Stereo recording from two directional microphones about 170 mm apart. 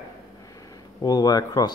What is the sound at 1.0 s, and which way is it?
Speech, 25° left (ahead or behind).